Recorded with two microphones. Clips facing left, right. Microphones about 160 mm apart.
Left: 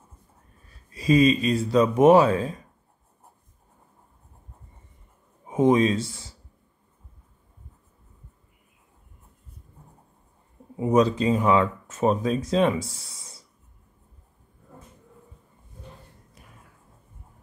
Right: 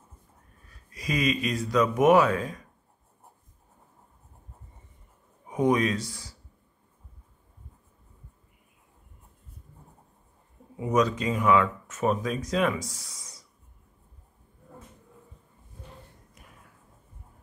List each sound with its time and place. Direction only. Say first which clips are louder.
0.9 s speech: left 9 dB; 30° left (ahead or behind)
5.5 s speech: left 4 dB; 25° left (ahead or behind)
10.8 s speech: left 5 dB; 30° left (ahead or behind)